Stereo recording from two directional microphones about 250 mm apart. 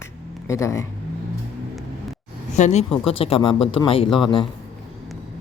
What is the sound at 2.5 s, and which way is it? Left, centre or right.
Speech, left.